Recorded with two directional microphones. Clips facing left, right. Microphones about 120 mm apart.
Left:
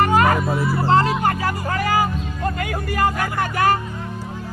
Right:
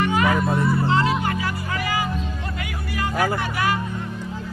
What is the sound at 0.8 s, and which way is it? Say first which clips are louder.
Music: left 4 dB; 45° left (ahead or behind).